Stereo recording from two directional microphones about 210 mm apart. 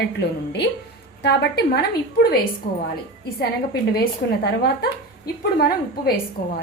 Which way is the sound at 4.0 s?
50° left (ahead or behind).